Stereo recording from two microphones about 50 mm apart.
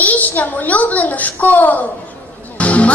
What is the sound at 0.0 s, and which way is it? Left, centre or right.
A woman's voice, left.